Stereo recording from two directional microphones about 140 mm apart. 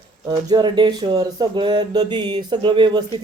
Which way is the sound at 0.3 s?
30° right (ahead or behind).